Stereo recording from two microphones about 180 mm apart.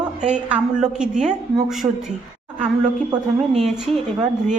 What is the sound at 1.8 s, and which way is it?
Speech, 20° right (ahead or behind).